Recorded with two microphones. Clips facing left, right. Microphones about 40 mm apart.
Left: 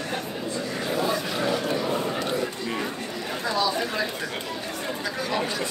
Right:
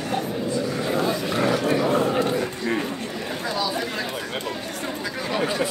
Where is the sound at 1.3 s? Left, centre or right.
Right.